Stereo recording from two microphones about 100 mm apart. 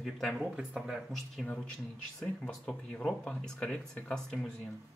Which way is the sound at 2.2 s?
10° left (ahead or behind).